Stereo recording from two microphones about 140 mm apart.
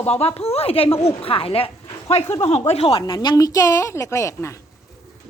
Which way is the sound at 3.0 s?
30° left (ahead or behind).